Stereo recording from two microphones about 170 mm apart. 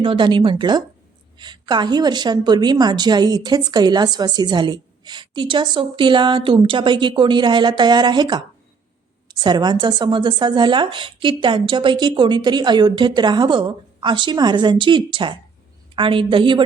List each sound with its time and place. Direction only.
0.0 s a woman's voice: 30° right (ahead or behind)